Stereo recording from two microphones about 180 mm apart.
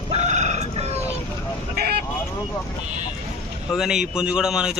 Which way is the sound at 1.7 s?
60° right (ahead or behind).